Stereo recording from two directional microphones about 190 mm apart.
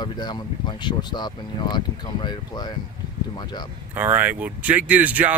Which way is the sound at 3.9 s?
10° right (ahead or behind).